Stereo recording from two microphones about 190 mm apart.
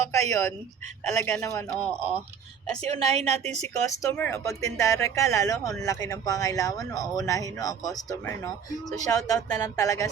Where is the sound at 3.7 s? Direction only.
15° left (ahead or behind).